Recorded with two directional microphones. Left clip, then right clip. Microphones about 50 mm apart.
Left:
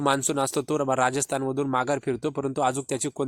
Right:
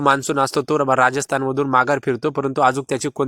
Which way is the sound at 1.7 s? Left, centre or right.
Right.